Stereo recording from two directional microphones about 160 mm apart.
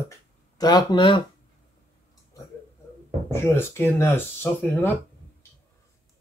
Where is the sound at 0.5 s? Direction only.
25° left (ahead or behind).